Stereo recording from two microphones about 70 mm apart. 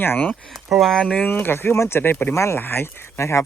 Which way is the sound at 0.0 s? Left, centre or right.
Left.